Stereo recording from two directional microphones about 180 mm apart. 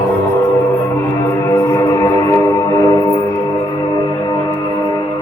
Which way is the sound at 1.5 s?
15° left (ahead or behind).